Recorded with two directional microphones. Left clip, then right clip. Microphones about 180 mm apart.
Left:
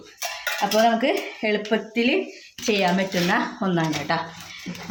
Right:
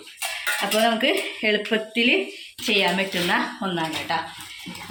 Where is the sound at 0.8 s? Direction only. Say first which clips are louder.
Left 1 dB; 25° left (ahead or behind).